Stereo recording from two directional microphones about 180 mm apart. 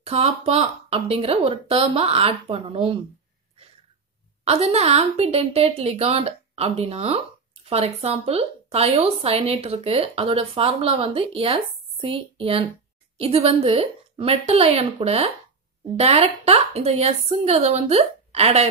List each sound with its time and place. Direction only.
0.0 s a woman's voice: 35° right (ahead or behind)
4.5 s a woman's voice: 35° right (ahead or behind)